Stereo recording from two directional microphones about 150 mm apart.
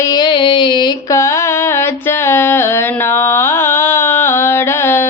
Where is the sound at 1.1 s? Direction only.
20° left (ahead or behind).